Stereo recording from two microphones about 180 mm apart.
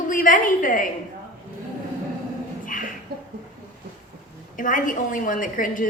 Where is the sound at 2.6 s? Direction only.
50° left (ahead or behind).